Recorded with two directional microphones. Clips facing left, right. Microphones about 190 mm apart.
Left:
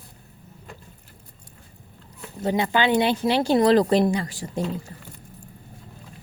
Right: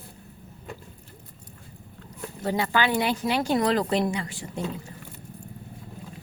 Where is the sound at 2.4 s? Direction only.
20° left (ahead or behind); by 4.6 s 35° left (ahead or behind).